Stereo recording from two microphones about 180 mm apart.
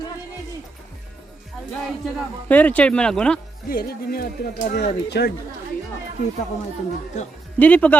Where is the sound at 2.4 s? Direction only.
10° left (ahead or behind).